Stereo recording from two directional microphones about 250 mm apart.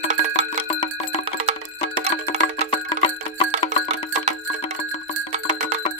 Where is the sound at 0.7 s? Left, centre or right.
Left.